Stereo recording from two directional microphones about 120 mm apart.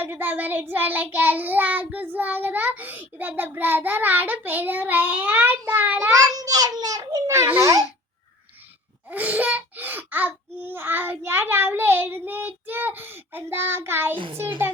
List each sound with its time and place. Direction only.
0.0 s child singing: 15° right (ahead or behind)
6.1 s a child's voice: 30° right (ahead or behind)
9.0 s child singing: 15° right (ahead or behind)